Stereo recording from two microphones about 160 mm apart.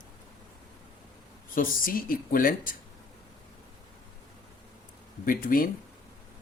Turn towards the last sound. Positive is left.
turn(degrees=60)  # may be behind; listen again after turning